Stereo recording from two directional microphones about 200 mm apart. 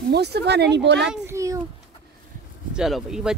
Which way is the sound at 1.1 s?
15° right (ahead or behind).